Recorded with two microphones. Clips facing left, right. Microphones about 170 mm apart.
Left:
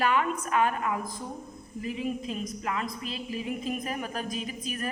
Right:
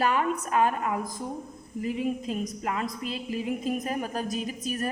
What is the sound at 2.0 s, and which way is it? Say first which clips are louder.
A woman's voice: right 2 dB; 45° right (ahead or behind).